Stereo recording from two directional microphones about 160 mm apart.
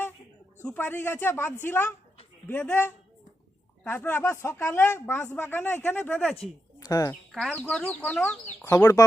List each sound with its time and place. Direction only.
0.6 s speech: 15° left (ahead or behind)
7.3 s speech: 5° left (ahead or behind); by 9.0 s 20° left (ahead or behind)